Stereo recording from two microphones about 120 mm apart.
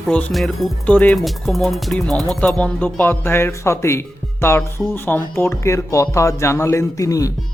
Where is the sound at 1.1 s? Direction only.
Centre (ahead or behind).